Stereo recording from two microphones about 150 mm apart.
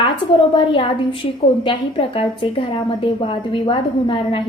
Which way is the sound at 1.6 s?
35° left (ahead or behind).